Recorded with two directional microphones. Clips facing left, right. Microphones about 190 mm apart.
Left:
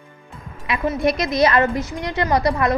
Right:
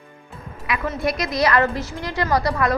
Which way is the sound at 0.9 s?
20° left (ahead or behind).